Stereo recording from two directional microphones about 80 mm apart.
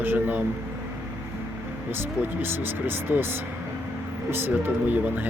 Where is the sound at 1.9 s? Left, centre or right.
Right.